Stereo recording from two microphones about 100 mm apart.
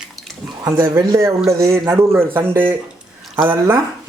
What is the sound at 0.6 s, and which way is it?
Speech, 30° right (ahead or behind).